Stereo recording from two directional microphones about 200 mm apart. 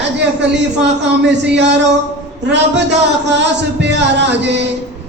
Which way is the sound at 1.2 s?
60° right (ahead or behind).